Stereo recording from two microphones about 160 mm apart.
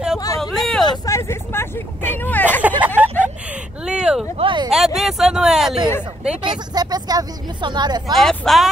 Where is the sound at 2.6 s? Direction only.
10° right (ahead or behind).